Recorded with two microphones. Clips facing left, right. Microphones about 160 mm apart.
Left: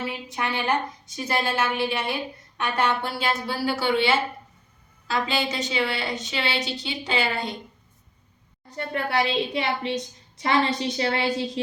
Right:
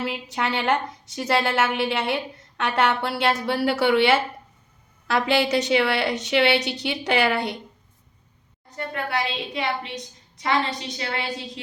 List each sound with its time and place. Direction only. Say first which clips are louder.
0.3 s a woman's voice: right 3 dB; 80° right
8.7 s a woman's voice: left 2 dB; 30° left (ahead or behind)